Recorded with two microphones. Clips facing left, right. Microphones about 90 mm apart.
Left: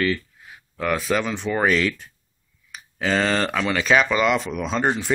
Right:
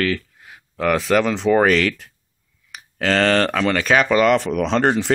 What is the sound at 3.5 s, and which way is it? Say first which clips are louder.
Speech: right 2 dB; 50° right (ahead or behind).